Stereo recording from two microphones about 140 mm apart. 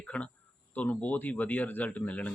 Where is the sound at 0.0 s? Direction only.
10° left (ahead or behind).